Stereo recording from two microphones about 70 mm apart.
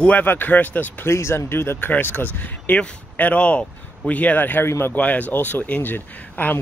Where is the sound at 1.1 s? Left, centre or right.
Left.